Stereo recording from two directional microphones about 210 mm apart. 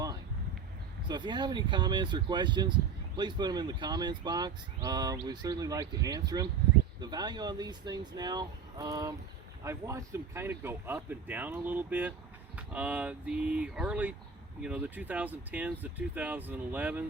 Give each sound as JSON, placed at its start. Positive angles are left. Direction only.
{"t": 1.0, "sound": "speech", "side_deg": -20}